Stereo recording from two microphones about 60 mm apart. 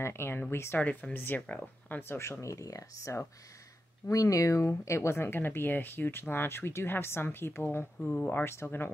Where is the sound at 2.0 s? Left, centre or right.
Left.